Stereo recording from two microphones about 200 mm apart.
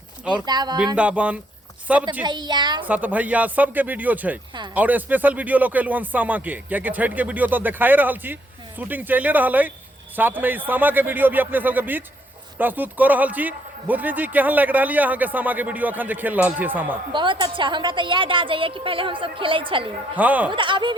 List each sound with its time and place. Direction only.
0.4 s a woman's voice: 20° right (ahead or behind)
0.9 s a man's voice: 5° right (ahead or behind)
2.2 s a woman's voice: 20° right (ahead or behind)
2.8 s a man's voice: 10° right (ahead or behind)
17.1 s a woman's voice: 25° right (ahead or behind)
20.1 s a man's voice: 10° right (ahead or behind)
20.5 s a woman's voice: 25° right (ahead or behind)